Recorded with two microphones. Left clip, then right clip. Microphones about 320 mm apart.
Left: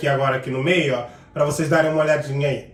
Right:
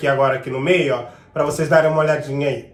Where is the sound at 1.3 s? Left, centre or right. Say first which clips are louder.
Right 3 dB; centre.